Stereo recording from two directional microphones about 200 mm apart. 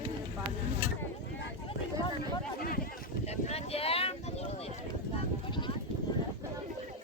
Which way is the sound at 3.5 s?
30° left (ahead or behind).